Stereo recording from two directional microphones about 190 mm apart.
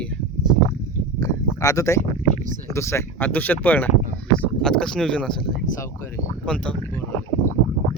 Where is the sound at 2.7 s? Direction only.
15° left (ahead or behind).